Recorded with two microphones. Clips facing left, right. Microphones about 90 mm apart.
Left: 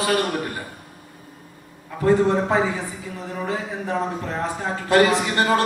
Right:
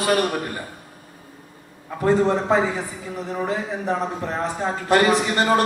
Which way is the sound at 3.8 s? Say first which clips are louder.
Right 1 dB; 20° right (ahead or behind).